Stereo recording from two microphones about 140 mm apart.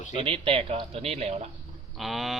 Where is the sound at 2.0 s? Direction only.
Centre (ahead or behind).